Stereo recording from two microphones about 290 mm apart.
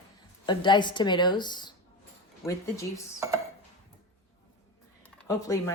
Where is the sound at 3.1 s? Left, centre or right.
Centre.